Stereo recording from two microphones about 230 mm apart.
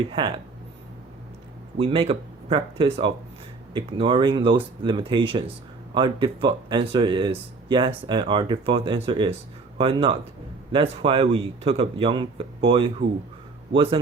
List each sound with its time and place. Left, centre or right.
0.1 s speech: right
1.8 s speech: right